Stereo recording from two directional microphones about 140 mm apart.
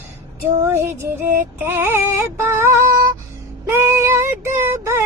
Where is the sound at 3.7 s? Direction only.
15° right (ahead or behind).